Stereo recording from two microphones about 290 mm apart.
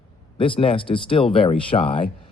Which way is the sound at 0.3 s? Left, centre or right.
Centre.